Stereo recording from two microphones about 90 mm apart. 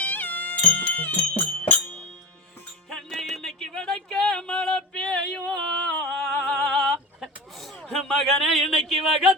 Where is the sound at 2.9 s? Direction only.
5° left (ahead or behind).